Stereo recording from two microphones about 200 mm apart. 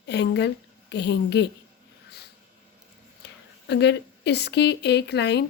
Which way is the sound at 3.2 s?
60° left (ahead or behind).